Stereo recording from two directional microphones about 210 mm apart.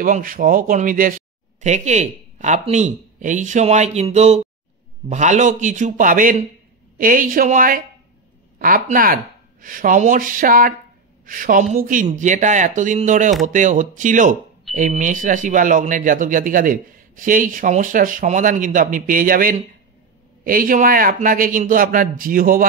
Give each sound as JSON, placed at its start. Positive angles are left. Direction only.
{"t": 0.0, "sound": "speech", "side_deg": -40}